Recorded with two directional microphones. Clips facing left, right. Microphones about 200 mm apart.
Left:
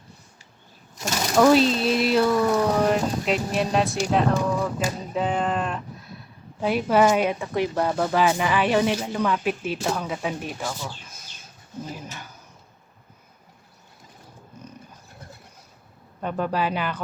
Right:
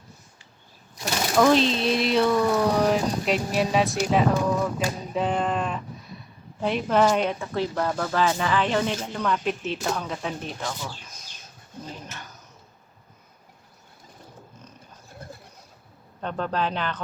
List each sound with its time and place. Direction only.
1.0 s speech: 5° left (ahead or behind)
11.9 s speech: 10° left (ahead or behind)
16.2 s speech: 10° left (ahead or behind)